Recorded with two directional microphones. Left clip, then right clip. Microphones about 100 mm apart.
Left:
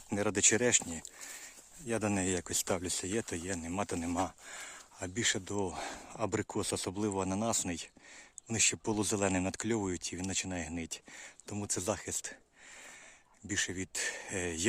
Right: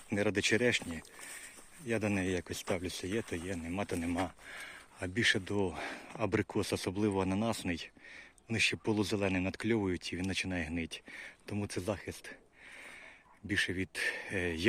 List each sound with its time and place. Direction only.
0.1 s speech: 45° left (ahead or behind)
1.9 s speech: 55° left (ahead or behind)
4.5 s speech: 35° left (ahead or behind)
11.8 s speech: 55° left (ahead or behind)
13.5 s speech: 30° left (ahead or behind)